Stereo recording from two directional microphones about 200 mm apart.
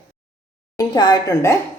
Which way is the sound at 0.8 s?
20° left (ahead or behind).